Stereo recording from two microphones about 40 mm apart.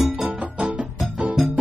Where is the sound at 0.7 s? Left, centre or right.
Right.